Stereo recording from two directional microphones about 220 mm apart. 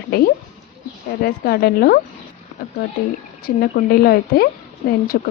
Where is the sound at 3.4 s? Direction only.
45° left (ahead or behind).